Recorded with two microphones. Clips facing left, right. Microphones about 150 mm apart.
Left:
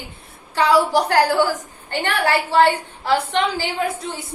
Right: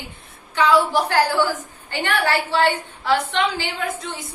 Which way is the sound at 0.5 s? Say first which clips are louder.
Left 1 dB; 35° left (ahead or behind).